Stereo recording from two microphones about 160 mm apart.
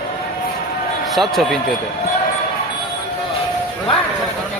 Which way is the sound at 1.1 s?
Centre (ahead or behind).